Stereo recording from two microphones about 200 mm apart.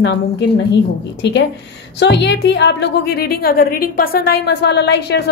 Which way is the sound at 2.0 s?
60° left (ahead or behind).